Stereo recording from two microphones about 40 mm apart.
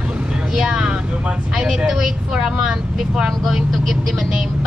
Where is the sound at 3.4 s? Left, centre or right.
Centre.